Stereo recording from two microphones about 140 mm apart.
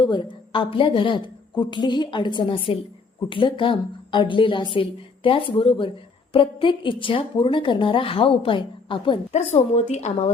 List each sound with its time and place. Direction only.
0.0 s a woman's voice: 35° left (ahead or behind)
9.3 s a woman's voice: 55° left (ahead or behind)